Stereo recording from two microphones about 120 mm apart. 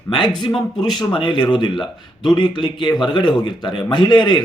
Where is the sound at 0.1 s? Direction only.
45° left (ahead or behind).